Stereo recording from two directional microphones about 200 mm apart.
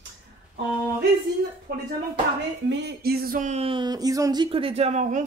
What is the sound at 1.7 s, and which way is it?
Speech, 50° right (ahead or behind).